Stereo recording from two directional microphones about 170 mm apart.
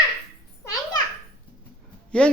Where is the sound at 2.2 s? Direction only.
5° left (ahead or behind).